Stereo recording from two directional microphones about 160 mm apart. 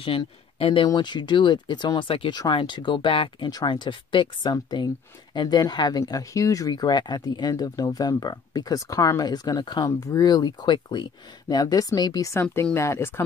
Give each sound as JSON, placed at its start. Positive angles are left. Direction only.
{"t": 0.0, "sound": "speech", "side_deg": 35}